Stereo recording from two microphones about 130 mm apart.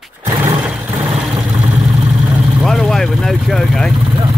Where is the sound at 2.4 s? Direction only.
Centre (ahead or behind).